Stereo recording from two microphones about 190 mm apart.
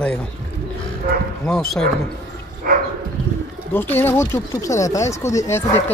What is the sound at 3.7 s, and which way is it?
Speech, 10° left (ahead or behind).